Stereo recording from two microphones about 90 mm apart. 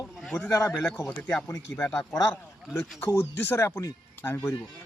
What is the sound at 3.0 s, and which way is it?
Speech, 25° left (ahead or behind).